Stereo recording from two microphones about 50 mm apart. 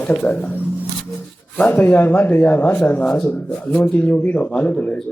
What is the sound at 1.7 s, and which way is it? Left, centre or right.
Speech, left.